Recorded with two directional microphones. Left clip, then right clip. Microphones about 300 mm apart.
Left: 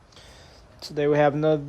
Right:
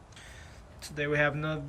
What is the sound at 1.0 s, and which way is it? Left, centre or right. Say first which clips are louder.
Speech: left 8 dB; centre.